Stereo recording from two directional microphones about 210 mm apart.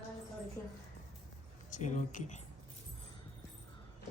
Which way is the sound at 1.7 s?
35° left (ahead or behind).